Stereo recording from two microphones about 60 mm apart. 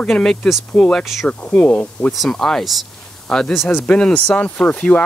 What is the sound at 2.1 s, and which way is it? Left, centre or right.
Speech, centre.